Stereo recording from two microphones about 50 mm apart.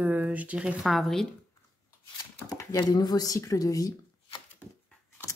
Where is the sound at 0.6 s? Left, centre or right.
Centre.